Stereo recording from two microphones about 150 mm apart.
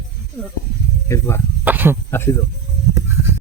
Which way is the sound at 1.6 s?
15° right (ahead or behind).